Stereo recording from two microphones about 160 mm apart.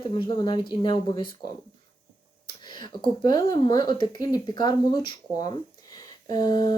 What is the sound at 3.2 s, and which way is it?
Speech, 25° left (ahead or behind).